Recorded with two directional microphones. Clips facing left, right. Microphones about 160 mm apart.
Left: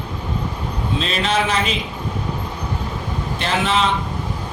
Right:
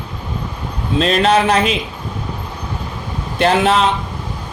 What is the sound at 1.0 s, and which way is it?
Speech, 50° right (ahead or behind).